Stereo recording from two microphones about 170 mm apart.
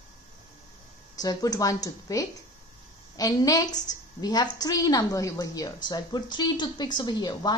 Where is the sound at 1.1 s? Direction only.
20° left (ahead or behind).